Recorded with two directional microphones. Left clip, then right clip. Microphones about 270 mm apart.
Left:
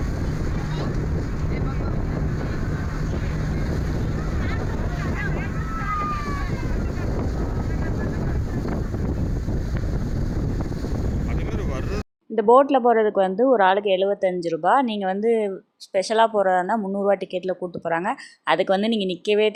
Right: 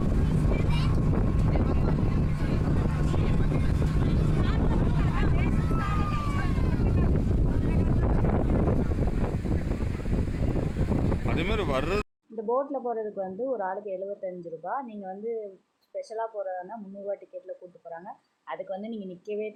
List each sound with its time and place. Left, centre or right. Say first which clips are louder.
12.4 s speech: left 13 dB; left